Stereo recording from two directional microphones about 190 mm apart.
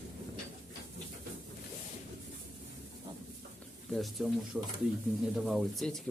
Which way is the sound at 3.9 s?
Centre (ahead or behind).